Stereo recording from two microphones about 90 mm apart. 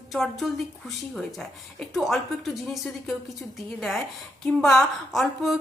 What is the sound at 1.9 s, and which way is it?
Speech, centre (ahead or behind).